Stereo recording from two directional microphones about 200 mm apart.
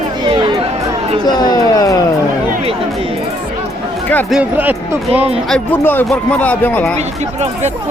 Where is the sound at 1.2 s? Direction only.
20° left (ahead or behind).